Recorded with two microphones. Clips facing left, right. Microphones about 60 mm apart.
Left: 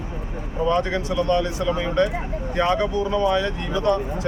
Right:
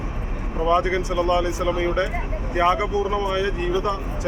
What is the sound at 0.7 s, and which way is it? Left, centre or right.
Speech, centre.